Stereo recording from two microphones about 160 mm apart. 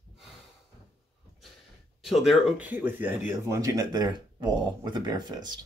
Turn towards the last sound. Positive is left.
turn(degrees=-25)  # may be behind; listen again after turning